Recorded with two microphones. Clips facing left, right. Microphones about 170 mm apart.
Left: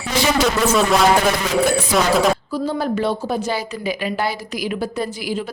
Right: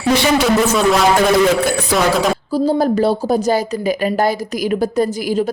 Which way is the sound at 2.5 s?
35° right (ahead or behind).